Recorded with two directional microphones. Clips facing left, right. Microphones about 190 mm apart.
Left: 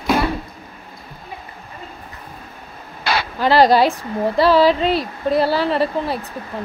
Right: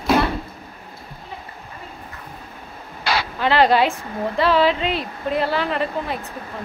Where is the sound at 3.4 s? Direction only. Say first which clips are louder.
Left 4 dB; 40° left (ahead or behind).